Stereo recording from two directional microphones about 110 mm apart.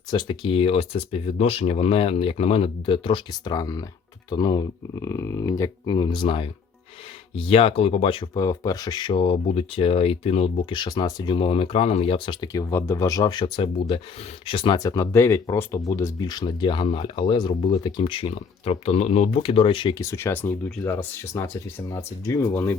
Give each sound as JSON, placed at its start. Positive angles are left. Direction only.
{"t": 0.1, "sound": "speech", "side_deg": 45}
{"t": 4.9, "sound": "speech", "side_deg": 25}
{"t": 8.4, "sound": "speech", "side_deg": 35}
{"t": 9.5, "sound": "speech", "side_deg": 60}
{"t": 10.7, "sound": "speech", "side_deg": 40}
{"t": 12.5, "sound": "speech", "side_deg": 25}
{"t": 14.8, "sound": "speech", "side_deg": 30}
{"t": 16.5, "sound": "speech", "side_deg": 45}
{"t": 20.0, "sound": "speech", "side_deg": 25}